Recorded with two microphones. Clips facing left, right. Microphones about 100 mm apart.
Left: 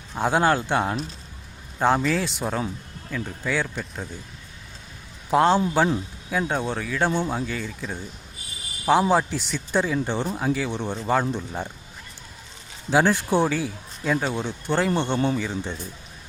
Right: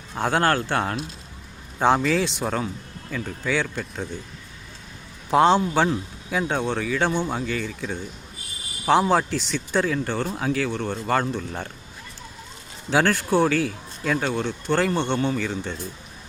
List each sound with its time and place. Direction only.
0.2 s a man's voice: 10° left (ahead or behind)
5.3 s a man's voice: centre (ahead or behind)
10.3 s a man's voice: 5° left (ahead or behind)
10.7 s a man's voice: 15° left (ahead or behind)
12.9 s a man's voice: 10° left (ahead or behind)